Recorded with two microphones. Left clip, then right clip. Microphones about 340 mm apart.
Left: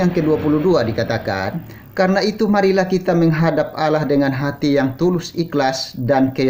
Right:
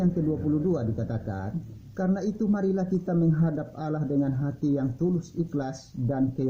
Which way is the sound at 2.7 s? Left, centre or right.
Centre.